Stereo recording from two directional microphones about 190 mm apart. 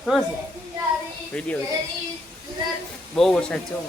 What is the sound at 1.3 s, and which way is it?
Speech, 5° left (ahead or behind).